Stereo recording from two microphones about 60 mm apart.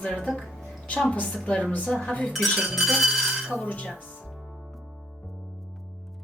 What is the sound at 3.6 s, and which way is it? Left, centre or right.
Speech, left.